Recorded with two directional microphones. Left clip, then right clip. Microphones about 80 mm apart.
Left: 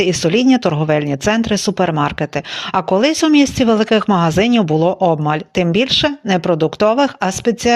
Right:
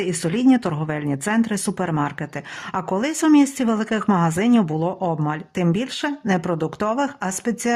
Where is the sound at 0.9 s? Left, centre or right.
Left.